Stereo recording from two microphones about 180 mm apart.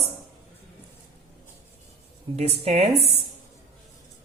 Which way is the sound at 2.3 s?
35° right (ahead or behind).